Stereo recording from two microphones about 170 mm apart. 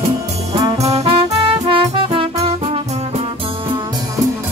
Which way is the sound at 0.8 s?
40° right (ahead or behind).